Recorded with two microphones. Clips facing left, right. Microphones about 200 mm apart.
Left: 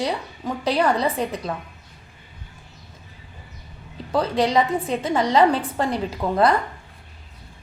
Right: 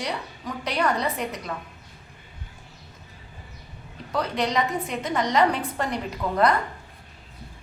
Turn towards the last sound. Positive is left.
turn(degrees=30)  # may be behind; listen again after turning